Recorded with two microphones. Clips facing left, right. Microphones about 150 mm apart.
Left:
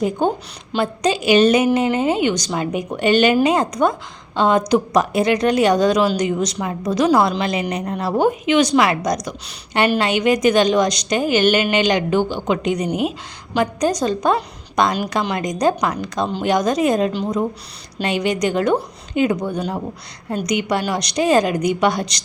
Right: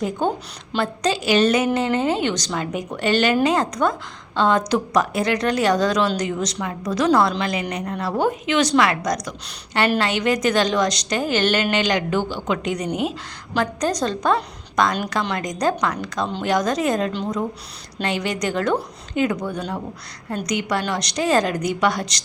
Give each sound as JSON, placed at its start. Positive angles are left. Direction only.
{"t": 0.2, "sound": "a woman's voice", "side_deg": 15}
{"t": 10.0, "sound": "a woman's voice", "side_deg": 15}
{"t": 12.9, "sound": "a woman's voice", "side_deg": -25}
{"t": 13.6, "sound": "a woman's voice", "side_deg": 15}